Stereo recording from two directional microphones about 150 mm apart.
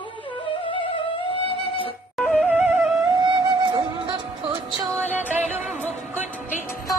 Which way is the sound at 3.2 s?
30° right (ahead or behind).